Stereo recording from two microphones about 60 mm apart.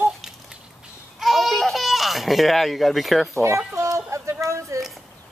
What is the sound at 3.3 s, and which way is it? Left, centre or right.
Speech, right.